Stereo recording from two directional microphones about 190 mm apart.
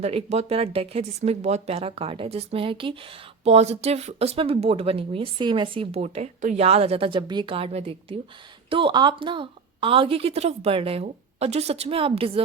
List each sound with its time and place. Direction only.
0.0 s a woman's voice: 30° right (ahead or behind)